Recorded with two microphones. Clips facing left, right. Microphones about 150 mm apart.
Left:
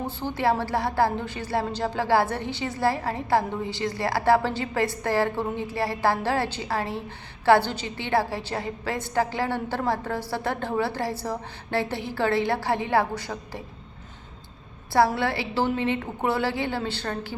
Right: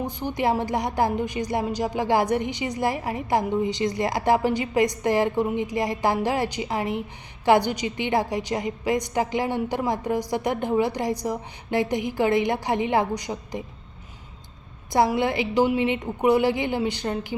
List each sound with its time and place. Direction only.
0.0 s a woman's voice: 15° right (ahead or behind)
14.9 s a woman's voice: 20° right (ahead or behind)